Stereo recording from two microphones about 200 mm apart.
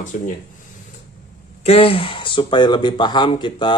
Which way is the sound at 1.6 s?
30° left (ahead or behind).